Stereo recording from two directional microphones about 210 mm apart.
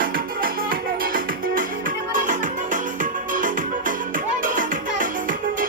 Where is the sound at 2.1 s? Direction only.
40° right (ahead or behind).